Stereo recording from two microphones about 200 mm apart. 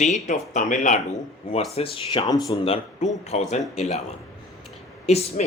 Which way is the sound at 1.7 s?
25° left (ahead or behind).